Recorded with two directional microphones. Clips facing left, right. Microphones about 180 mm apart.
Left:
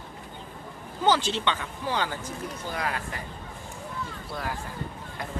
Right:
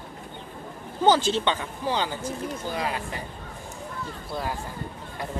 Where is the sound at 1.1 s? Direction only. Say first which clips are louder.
Right 3 dB; 40° right (ahead or behind).